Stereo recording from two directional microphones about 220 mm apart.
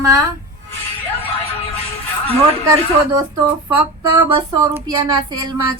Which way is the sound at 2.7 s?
20° right (ahead or behind).